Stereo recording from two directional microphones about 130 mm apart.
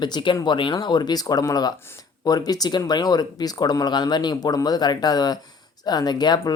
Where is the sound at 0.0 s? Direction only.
35° left (ahead or behind).